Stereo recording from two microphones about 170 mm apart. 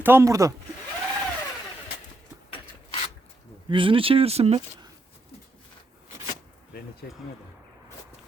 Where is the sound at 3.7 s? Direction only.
30° right (ahead or behind).